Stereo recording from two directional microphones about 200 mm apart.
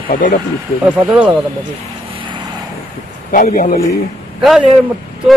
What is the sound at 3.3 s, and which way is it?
Speech, 40° left (ahead or behind).